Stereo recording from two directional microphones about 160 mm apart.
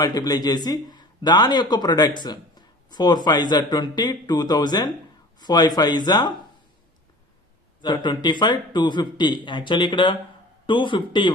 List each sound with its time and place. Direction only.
0.0 s a man's voice: 25° left (ahead or behind)
7.8 s a man's voice: 30° left (ahead or behind)